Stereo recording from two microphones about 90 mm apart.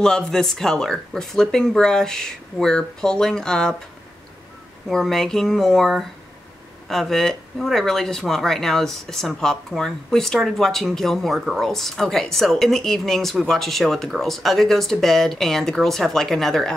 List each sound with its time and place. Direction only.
0.0 s speech: 5° left (ahead or behind)
4.8 s speech: centre (ahead or behind)